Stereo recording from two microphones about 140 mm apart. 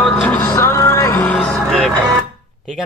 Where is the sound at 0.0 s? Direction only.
10° left (ahead or behind).